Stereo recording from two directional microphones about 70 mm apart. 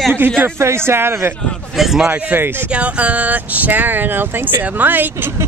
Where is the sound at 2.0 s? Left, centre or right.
Centre.